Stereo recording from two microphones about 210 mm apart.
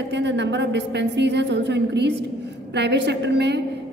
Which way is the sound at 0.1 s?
55° right (ahead or behind).